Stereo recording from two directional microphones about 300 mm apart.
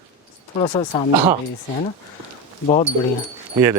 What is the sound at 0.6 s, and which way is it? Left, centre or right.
Speech, centre.